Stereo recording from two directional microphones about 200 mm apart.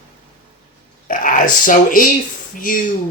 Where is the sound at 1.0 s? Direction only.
40° left (ahead or behind).